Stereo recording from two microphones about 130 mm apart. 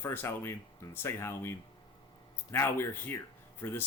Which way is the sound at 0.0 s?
15° left (ahead or behind).